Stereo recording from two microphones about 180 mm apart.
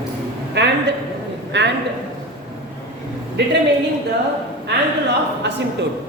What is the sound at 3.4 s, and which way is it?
Speech, 70° right (ahead or behind).